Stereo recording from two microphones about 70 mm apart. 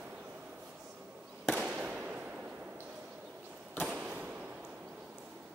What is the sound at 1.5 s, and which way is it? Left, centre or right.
Fireworks, centre.